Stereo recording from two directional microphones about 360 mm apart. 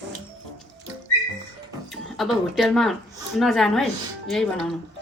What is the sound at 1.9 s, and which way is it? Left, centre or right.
A woman's voice, centre.